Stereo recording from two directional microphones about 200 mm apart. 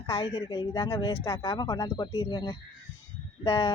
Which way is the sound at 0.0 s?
25° left (ahead or behind).